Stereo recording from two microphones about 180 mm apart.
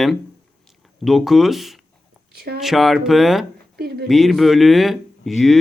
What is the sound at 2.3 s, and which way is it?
Speech, 60° right (ahead or behind).